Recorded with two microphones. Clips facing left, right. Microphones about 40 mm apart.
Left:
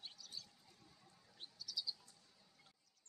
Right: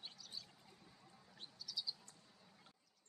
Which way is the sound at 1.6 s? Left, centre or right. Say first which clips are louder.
Even; centre.